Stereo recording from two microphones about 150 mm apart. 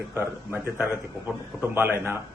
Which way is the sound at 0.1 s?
15° right (ahead or behind).